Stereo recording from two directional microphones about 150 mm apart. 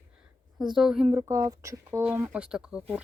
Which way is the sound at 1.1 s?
20° right (ahead or behind).